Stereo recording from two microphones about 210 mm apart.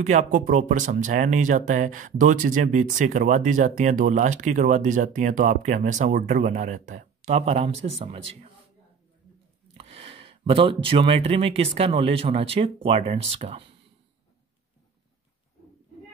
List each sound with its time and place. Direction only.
0.0 s speech: 35° right (ahead or behind)
9.8 s speech: 30° right (ahead or behind)